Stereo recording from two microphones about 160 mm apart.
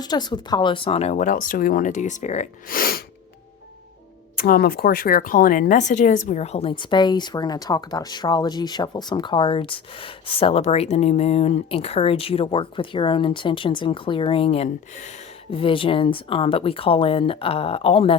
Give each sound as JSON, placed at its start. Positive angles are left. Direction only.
{"t": 0.0, "sound": "speech", "side_deg": 25}
{"t": 2.6, "sound": "speech", "side_deg": 65}
{"t": 4.4, "sound": "speech", "side_deg": 65}
{"t": 15.5, "sound": "speech", "side_deg": 35}